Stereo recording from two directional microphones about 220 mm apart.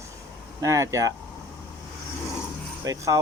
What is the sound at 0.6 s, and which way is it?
Speech, 15° right (ahead or behind).